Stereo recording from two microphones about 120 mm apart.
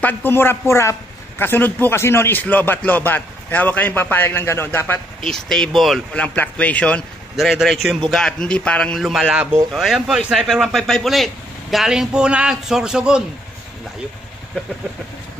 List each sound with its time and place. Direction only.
0.0 s a man's voice: 15° left (ahead or behind)
5.2 s a man's voice: 5° left (ahead or behind)
6.1 s a man's voice: 10° left (ahead or behind); by 13.2 s 5° right (ahead or behind)